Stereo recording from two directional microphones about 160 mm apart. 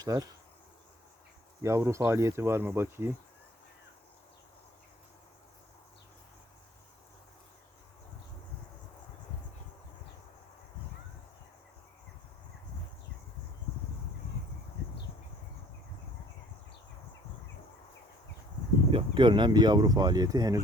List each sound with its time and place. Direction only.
0.0 s speech: 20° right (ahead or behind)
1.6 s speech: 20° right (ahead or behind)
18.9 s speech: 30° right (ahead or behind)